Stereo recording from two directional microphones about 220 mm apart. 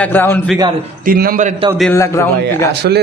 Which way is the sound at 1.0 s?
40° right (ahead or behind).